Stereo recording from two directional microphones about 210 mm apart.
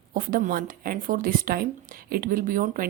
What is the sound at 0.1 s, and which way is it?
Speech, 45° right (ahead or behind).